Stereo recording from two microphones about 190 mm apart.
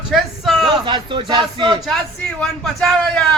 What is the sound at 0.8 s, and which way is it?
Speech, 25° right (ahead or behind).